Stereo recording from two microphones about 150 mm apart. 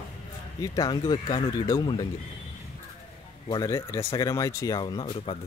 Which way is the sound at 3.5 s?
20° left (ahead or behind).